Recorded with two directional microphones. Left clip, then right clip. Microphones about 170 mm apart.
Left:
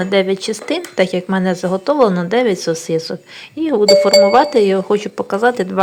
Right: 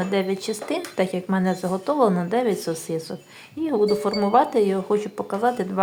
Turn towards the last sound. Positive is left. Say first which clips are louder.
# left 8 dB
turn(degrees=25)  # may be behind; listen again after turning